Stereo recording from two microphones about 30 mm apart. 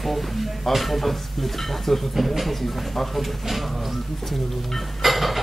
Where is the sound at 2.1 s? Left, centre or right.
Centre.